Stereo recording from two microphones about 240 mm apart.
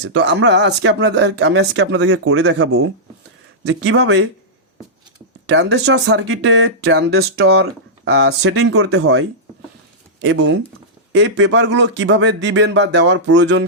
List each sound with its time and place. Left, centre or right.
0.0 s speech: right
5.5 s speech: right
7.4 s speech: right
11.1 s speech: right